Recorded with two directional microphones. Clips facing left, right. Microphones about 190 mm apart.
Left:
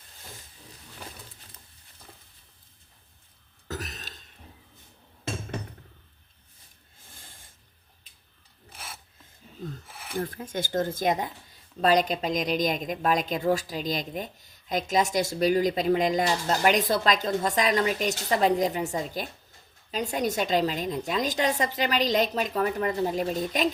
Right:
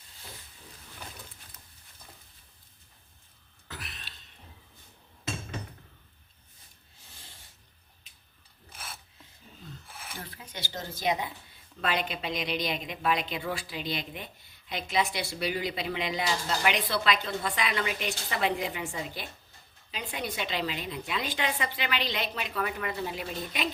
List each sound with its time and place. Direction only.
3.7 s a sound: 40° left (ahead or behind)
7.1 s snort: 50° left (ahead or behind)
10.2 s a woman's voice: 45° left (ahead or behind)